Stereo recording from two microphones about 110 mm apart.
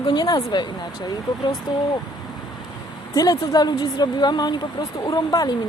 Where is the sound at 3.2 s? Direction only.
35° left (ahead or behind).